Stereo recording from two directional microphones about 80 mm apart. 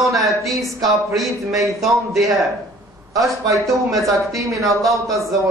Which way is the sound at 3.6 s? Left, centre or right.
Centre.